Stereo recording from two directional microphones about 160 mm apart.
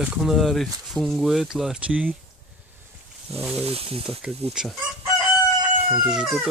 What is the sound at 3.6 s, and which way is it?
Speech, 35° right (ahead or behind).